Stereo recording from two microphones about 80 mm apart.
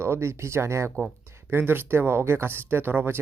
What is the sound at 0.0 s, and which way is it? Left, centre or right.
Speech, right.